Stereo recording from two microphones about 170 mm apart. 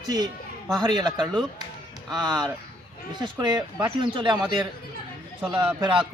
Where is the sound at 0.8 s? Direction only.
25° right (ahead or behind).